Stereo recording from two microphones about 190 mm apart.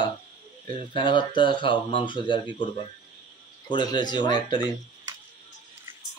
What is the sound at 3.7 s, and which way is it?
Speech, 25° left (ahead or behind).